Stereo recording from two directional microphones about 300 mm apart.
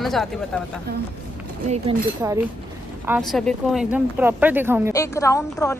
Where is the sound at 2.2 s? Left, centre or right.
Centre.